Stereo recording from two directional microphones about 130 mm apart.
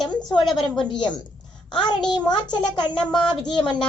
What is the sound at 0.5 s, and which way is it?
Speech, 35° left (ahead or behind).